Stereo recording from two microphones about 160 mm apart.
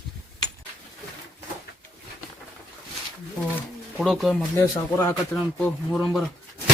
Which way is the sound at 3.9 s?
Centre (ahead or behind).